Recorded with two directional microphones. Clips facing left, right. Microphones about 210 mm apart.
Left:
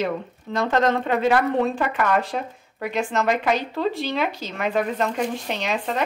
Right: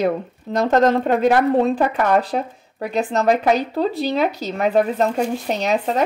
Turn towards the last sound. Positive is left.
turn(degrees=-40)  # may be behind; listen again after turning